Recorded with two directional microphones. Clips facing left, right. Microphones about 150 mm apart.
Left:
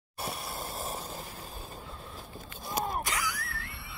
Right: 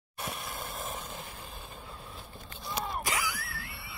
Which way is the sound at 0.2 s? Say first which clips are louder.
Left 2 dB; 35° left (ahead or behind).